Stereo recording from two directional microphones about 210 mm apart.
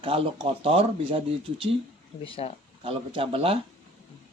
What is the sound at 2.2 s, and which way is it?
Speech, 25° left (ahead or behind).